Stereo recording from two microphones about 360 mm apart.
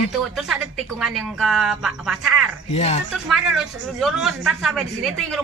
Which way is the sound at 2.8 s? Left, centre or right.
Centre.